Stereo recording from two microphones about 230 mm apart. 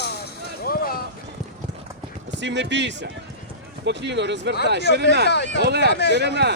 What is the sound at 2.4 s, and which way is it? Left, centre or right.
Speech, right.